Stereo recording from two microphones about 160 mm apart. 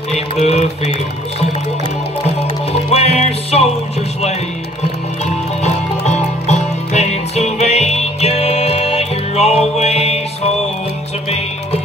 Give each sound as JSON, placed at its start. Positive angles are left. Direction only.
{"t": 0.1, "sound": "music", "side_deg": 40}
{"t": 2.7, "sound": "music", "side_deg": 40}
{"t": 5.2, "sound": "music", "side_deg": 45}